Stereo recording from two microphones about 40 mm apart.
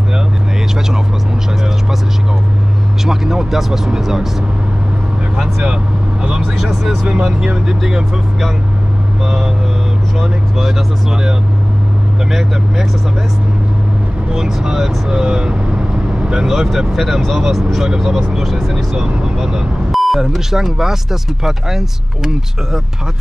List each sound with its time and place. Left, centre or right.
3.1 s speech: centre
6.6 s speech: centre
9.2 s speech: centre
12.3 s speech: centre
14.3 s speech: centre
19.9 s speech: centre